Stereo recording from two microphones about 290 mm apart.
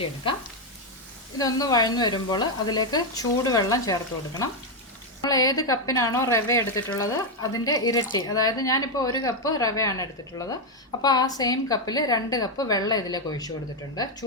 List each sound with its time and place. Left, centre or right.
1.4 s speech: centre
5.2 s speech: centre